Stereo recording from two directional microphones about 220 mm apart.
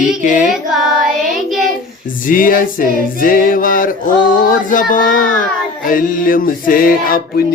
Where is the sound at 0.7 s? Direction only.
Centre (ahead or behind).